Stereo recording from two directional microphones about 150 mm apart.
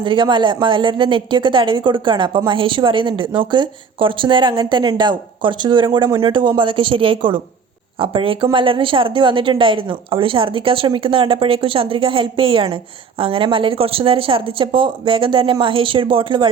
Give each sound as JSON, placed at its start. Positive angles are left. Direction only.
{"t": 0.0, "sound": "speech", "side_deg": -30}